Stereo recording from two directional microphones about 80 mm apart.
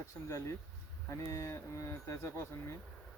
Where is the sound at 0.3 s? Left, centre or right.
Left.